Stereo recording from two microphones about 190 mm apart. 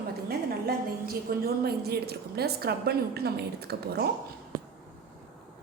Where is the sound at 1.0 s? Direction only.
55° right (ahead or behind).